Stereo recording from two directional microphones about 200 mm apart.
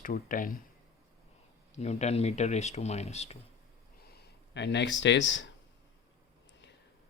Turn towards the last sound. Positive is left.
turn(degrees=65)  # may be behind; listen again after turning